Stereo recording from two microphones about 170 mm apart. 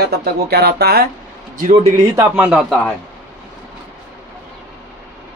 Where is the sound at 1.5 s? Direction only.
50° right (ahead or behind).